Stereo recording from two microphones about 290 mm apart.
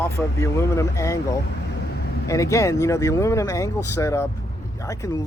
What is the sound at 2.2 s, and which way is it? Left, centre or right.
Speech, centre.